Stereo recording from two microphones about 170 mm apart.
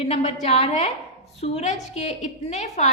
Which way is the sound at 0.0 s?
40° left (ahead or behind).